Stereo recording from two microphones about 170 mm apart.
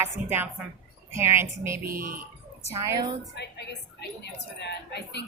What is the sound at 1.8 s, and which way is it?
Speech, 55° right (ahead or behind).